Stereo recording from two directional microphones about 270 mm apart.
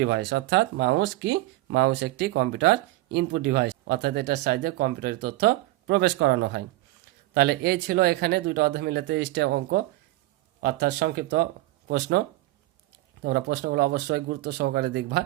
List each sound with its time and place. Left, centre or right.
0.0 s speech: right
13.2 s speech: right